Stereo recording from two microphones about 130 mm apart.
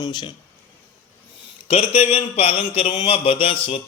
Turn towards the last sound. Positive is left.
turn(degrees=45)  # may be behind; listen again after turning